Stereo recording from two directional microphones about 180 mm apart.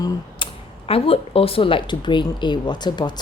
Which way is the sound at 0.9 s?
30° left (ahead or behind).